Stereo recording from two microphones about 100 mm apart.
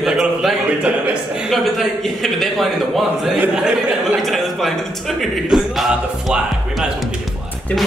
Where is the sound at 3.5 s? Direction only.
10° right (ahead or behind).